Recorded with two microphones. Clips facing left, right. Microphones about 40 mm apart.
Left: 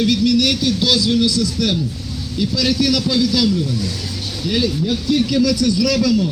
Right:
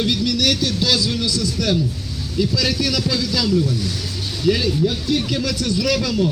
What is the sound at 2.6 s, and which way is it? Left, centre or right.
Speech, right.